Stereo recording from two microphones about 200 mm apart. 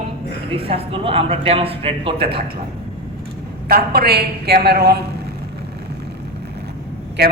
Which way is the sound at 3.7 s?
50° right (ahead or behind).